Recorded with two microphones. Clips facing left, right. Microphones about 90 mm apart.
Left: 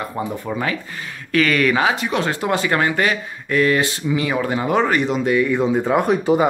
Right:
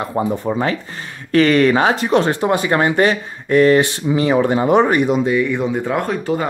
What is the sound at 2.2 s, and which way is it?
Speech, 20° right (ahead or behind).